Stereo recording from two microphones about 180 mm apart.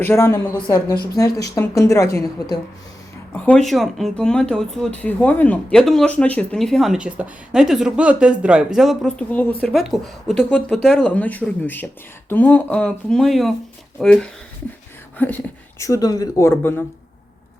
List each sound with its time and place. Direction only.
0.0 s speech: 15° left (ahead or behind)
3.3 s speech: 5° left (ahead or behind)